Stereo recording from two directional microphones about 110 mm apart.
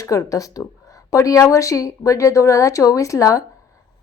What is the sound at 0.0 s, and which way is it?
A woman's voice, 30° left (ahead or behind).